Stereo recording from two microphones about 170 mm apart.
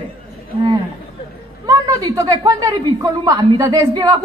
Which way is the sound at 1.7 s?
20° right (ahead or behind).